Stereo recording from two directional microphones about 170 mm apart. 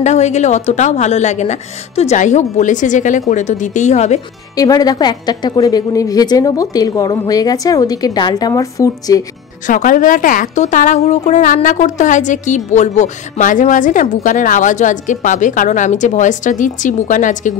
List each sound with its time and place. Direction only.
0.0 s a woman's voice: 45° left (ahead or behind)
4.6 s a woman's voice: 20° left (ahead or behind)
9.7 s a woman's voice: 50° left (ahead or behind)